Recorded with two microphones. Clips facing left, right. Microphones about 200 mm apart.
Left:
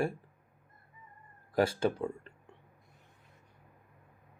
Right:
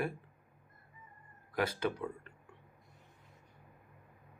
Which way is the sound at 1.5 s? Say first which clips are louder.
Left 6 dB; 30° left (ahead or behind).